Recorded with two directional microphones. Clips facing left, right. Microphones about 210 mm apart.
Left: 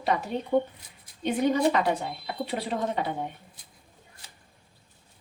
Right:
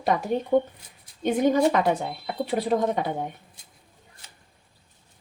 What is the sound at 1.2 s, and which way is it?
A woman's voice, 45° right (ahead or behind).